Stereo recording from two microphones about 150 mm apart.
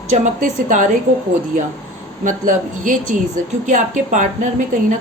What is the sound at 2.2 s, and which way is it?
A woman's voice, 60° right (ahead or behind).